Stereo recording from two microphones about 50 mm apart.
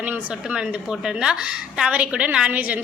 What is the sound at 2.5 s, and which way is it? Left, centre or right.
Speech, right.